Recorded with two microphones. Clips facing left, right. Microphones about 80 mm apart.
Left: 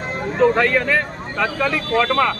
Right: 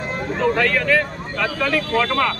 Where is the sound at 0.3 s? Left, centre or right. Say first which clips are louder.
Left 4 dB; centre.